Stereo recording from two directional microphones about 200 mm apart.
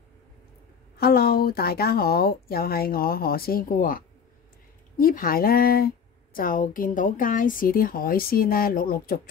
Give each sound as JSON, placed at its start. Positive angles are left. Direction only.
{"t": 0.9, "sound": "a woman's voice", "side_deg": 50}